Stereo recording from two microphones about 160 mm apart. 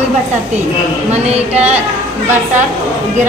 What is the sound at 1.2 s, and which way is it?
Speech, 40° right (ahead or behind).